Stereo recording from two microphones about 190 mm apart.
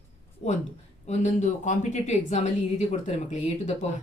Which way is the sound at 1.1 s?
40° left (ahead or behind).